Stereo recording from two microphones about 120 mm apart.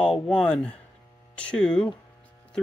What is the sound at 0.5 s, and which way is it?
Speech, 10° left (ahead or behind).